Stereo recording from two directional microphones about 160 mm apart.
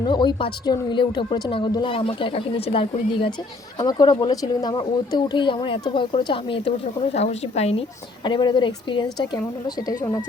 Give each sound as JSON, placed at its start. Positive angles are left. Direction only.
{"t": 0.0, "sound": "a woman's voice", "side_deg": 30}